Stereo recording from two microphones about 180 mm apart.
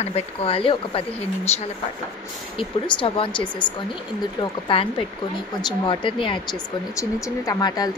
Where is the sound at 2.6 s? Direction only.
30° left (ahead or behind).